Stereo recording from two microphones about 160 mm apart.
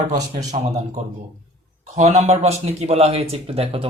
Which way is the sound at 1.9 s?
45° right (ahead or behind).